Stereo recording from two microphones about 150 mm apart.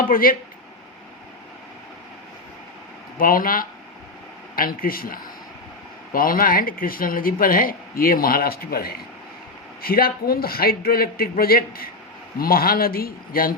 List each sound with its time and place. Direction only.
0.0 s speech: 75° left (ahead or behind)
3.2 s speech: 70° left (ahead or behind); by 9.0 s 90° left
9.8 s a man's voice: 80° left